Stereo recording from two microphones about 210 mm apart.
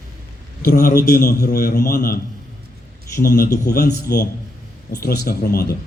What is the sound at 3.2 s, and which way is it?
A man's voice, 45° left (ahead or behind).